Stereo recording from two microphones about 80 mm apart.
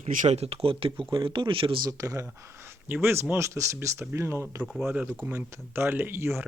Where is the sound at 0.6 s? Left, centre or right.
Right.